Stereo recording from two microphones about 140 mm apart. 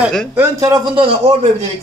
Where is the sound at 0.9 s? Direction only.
45° right (ahead or behind).